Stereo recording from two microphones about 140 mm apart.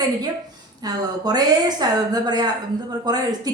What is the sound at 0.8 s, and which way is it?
A woman's voice, 30° right (ahead or behind).